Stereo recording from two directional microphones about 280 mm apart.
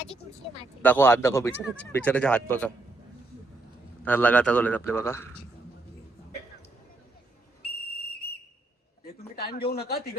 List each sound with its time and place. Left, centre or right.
0.8 s a man's voice: centre
4.0 s a man's voice: centre
9.4 s speech: left